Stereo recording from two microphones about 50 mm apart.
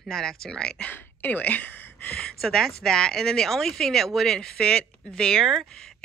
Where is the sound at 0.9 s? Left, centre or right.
Left.